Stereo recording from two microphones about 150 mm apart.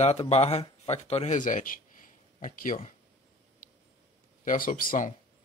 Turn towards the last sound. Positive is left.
turn(degrees=60)  # may be behind; listen again after turning